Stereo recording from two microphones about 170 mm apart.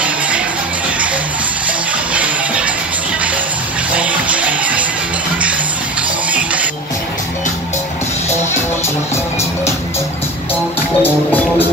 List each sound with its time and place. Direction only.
0.8 s music: 10° right (ahead or behind)
2.1 s music: 5° right (ahead or behind)
3.9 s music: 10° right (ahead or behind)
6.3 s music: 10° right (ahead or behind)
8.8 s music: 15° left (ahead or behind)